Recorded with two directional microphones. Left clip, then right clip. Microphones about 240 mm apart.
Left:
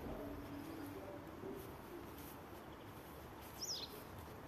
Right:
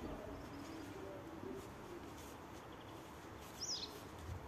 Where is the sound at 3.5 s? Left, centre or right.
Left.